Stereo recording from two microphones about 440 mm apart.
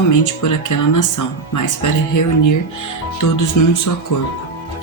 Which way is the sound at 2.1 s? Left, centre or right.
Left.